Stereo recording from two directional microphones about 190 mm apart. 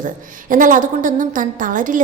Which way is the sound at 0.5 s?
45° right (ahead or behind).